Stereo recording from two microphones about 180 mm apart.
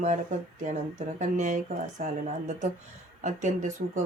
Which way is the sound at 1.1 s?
45° right (ahead or behind).